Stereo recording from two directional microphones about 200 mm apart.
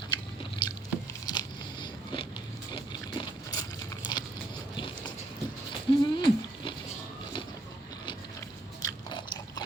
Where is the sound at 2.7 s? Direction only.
20° left (ahead or behind).